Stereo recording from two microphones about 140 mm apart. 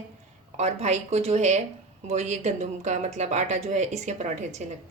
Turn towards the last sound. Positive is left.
turn(degrees=-55)  # may be behind; listen again after turning